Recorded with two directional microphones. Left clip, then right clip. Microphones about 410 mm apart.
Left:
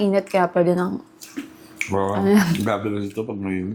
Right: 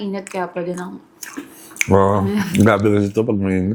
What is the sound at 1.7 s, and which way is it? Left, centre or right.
Speech, right.